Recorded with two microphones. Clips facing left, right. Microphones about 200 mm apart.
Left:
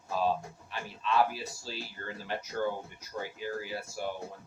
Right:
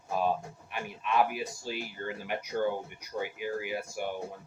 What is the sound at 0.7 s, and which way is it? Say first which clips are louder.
Speech: even; 15° right (ahead or behind).